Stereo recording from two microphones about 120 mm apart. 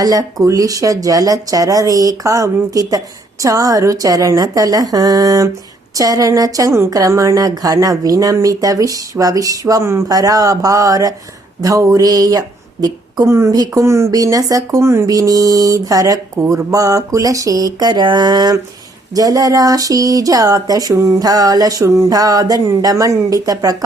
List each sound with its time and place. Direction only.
0.0 s a woman's voice: 30° right (ahead or behind)